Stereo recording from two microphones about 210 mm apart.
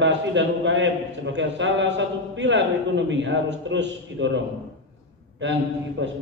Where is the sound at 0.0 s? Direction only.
60° right (ahead or behind).